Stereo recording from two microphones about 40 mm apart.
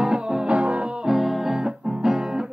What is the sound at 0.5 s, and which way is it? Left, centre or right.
Music, right.